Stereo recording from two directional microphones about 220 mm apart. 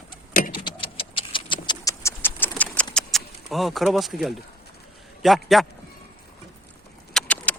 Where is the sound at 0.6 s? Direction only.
25° left (ahead or behind); by 2.9 s 10° left (ahead or behind).